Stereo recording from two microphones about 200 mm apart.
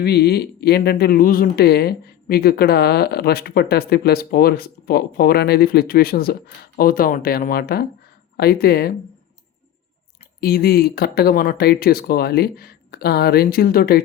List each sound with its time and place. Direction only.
0.0 s speech: 55° left (ahead or behind)
10.4 s speech: 50° left (ahead or behind)